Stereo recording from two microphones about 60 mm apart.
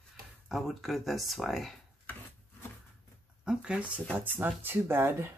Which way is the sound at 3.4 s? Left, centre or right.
Centre.